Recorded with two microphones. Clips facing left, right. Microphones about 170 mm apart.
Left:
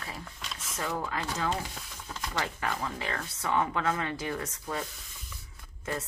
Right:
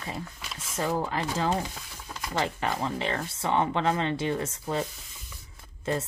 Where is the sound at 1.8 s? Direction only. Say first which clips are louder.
Right 1 dB; 10° right (ahead or behind).